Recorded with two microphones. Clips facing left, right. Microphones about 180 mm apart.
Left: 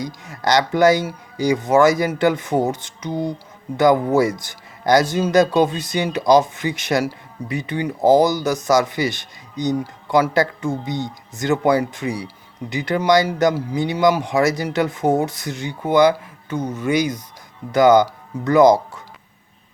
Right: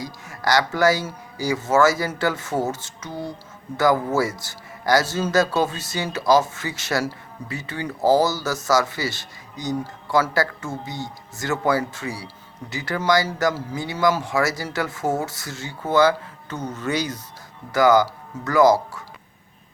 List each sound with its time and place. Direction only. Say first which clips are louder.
0.0 s speech: left 3 dB; 20° left (ahead or behind)